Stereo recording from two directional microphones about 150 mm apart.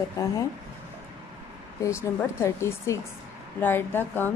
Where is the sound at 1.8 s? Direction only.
15° left (ahead or behind).